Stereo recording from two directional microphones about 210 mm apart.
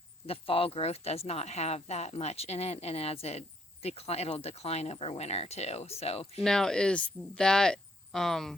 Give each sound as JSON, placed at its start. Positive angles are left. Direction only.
{"t": 0.3, "sound": "speech", "side_deg": 25}
{"t": 6.4, "sound": "speech", "side_deg": 5}